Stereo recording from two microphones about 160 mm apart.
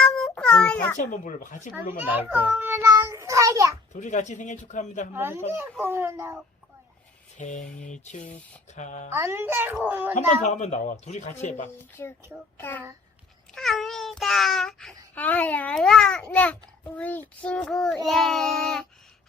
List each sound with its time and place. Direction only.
0.0 s a sound: 5° left (ahead or behind)
0.9 s speech: 50° left (ahead or behind)
2.0 s a child's voice: 10° right (ahead or behind)
3.9 s speech: 50° left (ahead or behind)
5.1 s a child's voice: 15° right (ahead or behind)
7.3 s speech: 50° left (ahead or behind)
9.1 s a child's voice: 15° right (ahead or behind)
10.2 s speech: 45° left (ahead or behind)
11.8 s speech: 15° left (ahead or behind)
13.5 s speech: centre (ahead or behind)